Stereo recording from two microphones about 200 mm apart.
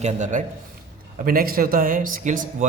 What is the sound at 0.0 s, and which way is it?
A man's voice, 40° right (ahead or behind).